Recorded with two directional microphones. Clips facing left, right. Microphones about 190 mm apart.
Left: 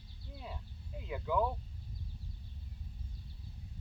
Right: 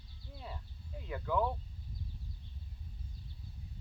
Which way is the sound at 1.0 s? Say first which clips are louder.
Even; 10° left (ahead or behind).